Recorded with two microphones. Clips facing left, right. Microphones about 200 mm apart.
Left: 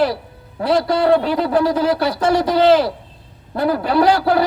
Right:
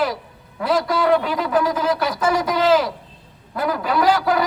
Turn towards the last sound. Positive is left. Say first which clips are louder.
# left 3 dB
turn(degrees=30)  # may be behind; listen again after turning